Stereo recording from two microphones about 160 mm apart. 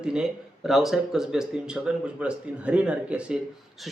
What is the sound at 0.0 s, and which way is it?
Speech, 5° right (ahead or behind).